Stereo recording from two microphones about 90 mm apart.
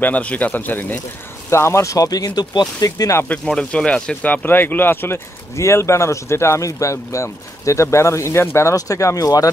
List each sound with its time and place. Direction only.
0.0 s speech: 15° left (ahead or behind)
1.5 s speech: 30° left (ahead or behind)
3.3 s speech: 10° left (ahead or behind); by 9.5 s 40° left (ahead or behind)